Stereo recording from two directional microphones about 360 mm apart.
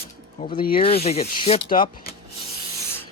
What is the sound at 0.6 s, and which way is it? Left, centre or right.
Rub, centre.